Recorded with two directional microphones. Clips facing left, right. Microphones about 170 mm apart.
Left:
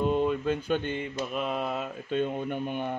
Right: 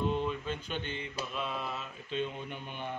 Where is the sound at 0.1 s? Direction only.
50° left (ahead or behind).